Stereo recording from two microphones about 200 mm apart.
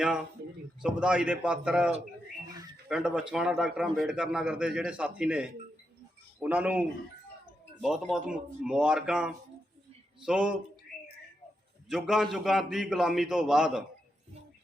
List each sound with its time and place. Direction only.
0.0 s a man's voice: 5° right (ahead or behind)
11.9 s a man's voice: centre (ahead or behind)